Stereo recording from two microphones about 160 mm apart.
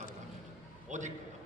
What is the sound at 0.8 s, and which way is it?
Speech, 50° right (ahead or behind).